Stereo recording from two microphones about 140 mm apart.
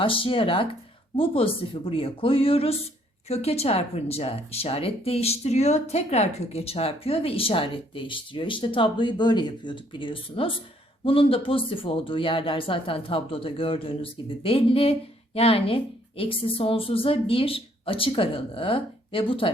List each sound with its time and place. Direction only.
0.0 s a woman's voice: 40° left (ahead or behind)